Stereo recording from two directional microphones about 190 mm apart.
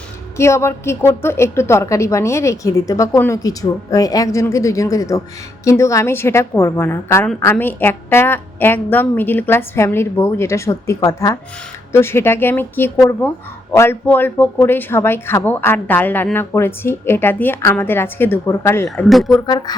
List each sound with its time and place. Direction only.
0.3 s a man's voice: 15° left (ahead or behind)
19.0 s speech: centre (ahead or behind)
19.5 s speech: 20° left (ahead or behind)